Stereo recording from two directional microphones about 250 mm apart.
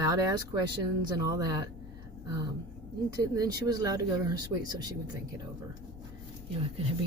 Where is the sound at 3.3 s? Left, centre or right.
Centre.